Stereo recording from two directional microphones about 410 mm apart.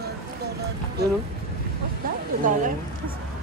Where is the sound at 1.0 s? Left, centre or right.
Right.